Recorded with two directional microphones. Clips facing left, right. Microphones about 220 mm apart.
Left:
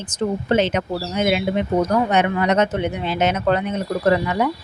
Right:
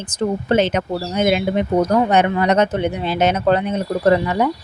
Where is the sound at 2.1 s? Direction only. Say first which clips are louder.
Right 2 dB; 35° right (ahead or behind).